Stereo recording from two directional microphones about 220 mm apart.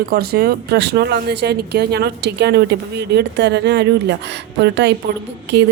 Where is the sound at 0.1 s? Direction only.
45° right (ahead or behind).